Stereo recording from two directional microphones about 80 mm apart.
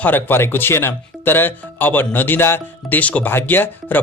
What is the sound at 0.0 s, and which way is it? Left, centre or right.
Speech, left.